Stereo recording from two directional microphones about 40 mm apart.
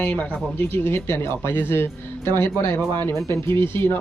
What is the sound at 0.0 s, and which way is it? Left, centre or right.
Speech, left.